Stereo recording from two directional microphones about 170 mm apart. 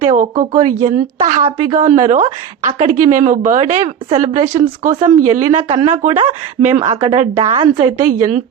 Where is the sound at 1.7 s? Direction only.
45° right (ahead or behind).